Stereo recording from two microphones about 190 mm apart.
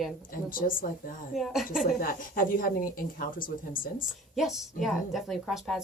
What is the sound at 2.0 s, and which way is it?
Speech, 50° left (ahead or behind).